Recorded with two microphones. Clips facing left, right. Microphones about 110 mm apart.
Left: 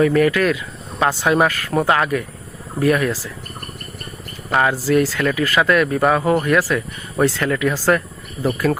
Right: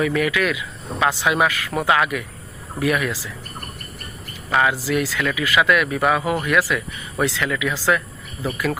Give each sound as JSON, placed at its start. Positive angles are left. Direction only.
{"t": 0.0, "sound": "speech", "side_deg": 40}
{"t": 4.5, "sound": "speech", "side_deg": 35}